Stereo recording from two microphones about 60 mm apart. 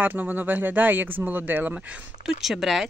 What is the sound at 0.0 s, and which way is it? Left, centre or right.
Speech, right.